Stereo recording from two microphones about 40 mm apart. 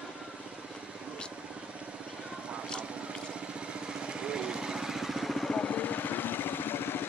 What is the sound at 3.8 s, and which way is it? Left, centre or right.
Vehicle, right.